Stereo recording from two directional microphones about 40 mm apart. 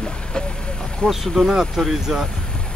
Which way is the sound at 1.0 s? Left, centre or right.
Centre.